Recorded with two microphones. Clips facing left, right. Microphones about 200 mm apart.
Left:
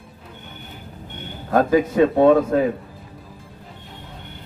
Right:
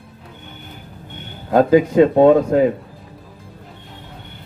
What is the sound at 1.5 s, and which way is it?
Speech, 20° right (ahead or behind).